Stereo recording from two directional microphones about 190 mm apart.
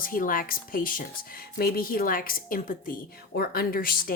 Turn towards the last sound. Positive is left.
turn(degrees=50)  # may be behind; listen again after turning